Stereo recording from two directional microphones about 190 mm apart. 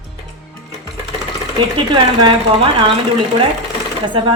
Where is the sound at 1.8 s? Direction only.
25° right (ahead or behind).